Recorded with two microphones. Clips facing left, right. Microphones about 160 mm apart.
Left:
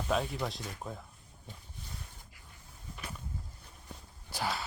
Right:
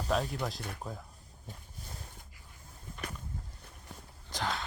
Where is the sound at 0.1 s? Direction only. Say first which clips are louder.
Right 1 dB; centre (ahead or behind).